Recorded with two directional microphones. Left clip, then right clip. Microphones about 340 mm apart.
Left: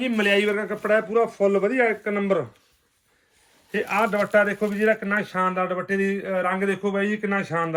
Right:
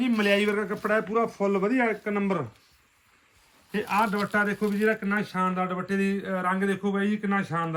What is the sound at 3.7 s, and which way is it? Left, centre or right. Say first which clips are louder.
A man's voice: left 3 dB; centre.